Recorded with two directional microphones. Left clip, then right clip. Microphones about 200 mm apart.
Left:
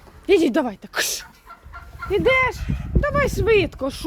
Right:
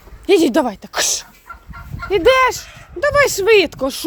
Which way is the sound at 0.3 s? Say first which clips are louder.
Right 4 dB; 15° right (ahead or behind).